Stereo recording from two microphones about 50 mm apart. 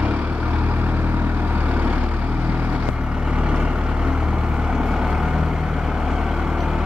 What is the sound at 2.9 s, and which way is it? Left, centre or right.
Vehicle, centre.